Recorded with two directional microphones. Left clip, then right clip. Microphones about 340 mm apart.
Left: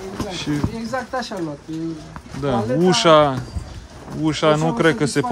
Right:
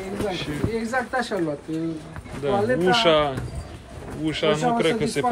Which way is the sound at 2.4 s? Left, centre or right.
Centre.